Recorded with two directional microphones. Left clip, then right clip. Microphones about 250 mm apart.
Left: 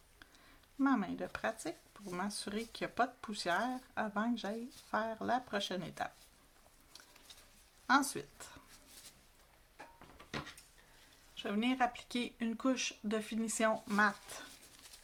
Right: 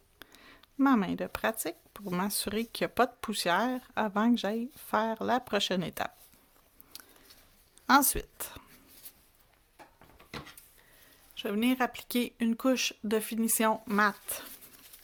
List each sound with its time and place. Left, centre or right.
0.2 s speech: right
6.9 s a sound: right
7.9 s speech: right
11.3 s speech: right